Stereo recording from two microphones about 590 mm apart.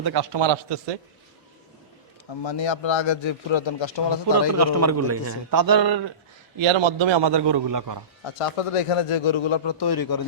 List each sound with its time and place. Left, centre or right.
0.0 s a man's voice: right
2.4 s a man's voice: left
4.5 s a man's voice: right
6.6 s a man's voice: right
8.2 s a man's voice: left